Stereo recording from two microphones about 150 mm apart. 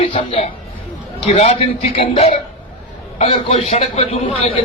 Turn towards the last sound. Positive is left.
turn(degrees=40)  # may be behind; listen again after turning